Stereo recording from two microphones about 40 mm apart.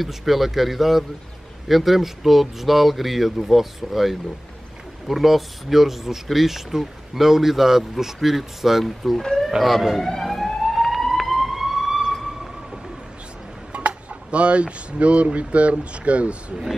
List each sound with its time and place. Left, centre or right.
0.0 s speech: centre
9.6 s emergency vehicle: centre
12.0 s a sound: centre
13.7 s speech: right